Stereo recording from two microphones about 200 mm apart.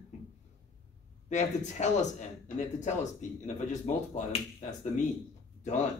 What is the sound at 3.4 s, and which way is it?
Speech, 35° left (ahead or behind).